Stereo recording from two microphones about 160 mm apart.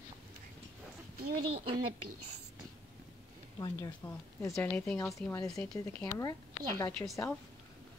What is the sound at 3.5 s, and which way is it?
Speech, 20° left (ahead or behind).